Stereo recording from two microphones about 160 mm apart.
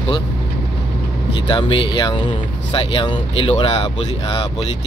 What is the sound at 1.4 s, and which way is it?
Speech, 30° left (ahead or behind).